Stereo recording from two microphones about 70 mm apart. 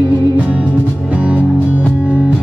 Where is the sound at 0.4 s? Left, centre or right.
Centre.